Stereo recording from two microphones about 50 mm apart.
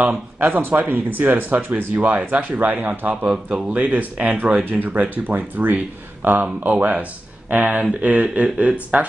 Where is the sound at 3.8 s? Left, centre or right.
Right.